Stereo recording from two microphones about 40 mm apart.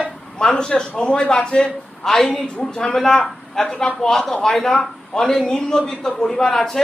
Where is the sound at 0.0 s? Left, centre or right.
Centre.